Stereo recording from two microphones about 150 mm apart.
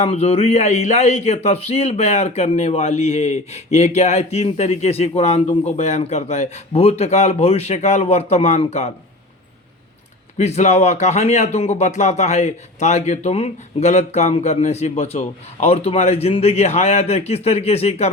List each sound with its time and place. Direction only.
0.0 s speech: 45° left (ahead or behind)
10.3 s speech: 50° left (ahead or behind)